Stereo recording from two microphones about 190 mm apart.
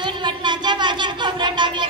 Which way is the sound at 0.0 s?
25° right (ahead or behind).